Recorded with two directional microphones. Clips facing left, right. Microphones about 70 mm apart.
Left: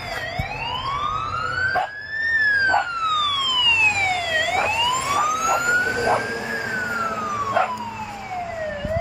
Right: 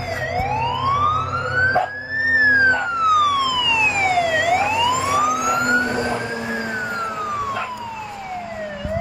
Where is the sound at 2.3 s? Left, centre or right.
Centre.